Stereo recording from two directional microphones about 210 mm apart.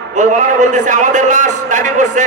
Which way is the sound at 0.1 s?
35° right (ahead or behind).